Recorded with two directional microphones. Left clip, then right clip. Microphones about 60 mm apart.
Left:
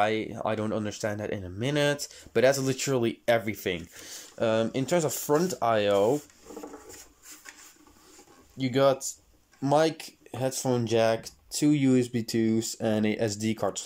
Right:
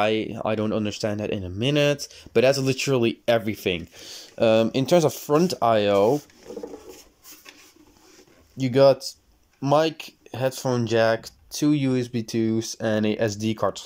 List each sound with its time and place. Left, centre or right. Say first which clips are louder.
0.0 s speech: right 4 dB; centre
1.9 s speech: right 4 dB; centre
2.3 s speech: right 4 dB; centre
4.4 s speech: right 7 dB; right; by 6.1 s centre
8.5 s speech: right 7 dB; right
9.6 s speech: right 3 dB; centre